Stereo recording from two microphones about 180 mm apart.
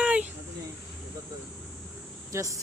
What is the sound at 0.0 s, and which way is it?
Insect, 5° right (ahead or behind).